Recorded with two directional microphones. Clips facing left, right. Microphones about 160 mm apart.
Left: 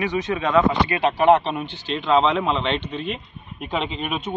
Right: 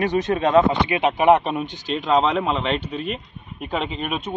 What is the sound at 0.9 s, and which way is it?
Speech, 15° right (ahead or behind).